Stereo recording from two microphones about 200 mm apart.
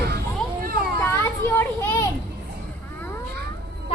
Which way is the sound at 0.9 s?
15° left (ahead or behind).